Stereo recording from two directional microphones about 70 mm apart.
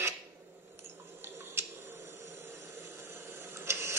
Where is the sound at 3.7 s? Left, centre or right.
Right.